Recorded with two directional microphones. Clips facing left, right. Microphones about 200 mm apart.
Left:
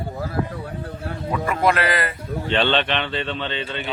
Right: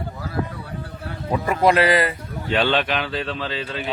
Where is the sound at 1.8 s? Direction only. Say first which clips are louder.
Right 5 dB; 30° right (ahead or behind).